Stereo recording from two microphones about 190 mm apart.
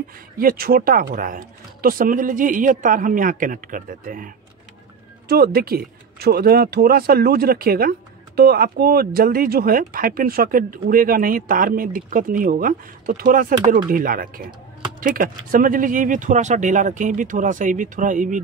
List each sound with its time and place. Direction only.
0.4 s speech: 50° right (ahead or behind)
5.3 s speech: 55° right (ahead or behind)